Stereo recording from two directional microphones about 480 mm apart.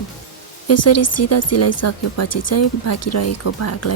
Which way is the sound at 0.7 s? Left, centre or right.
Left.